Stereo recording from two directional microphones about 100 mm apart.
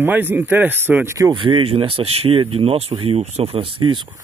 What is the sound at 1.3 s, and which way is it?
Speech, 55° right (ahead or behind).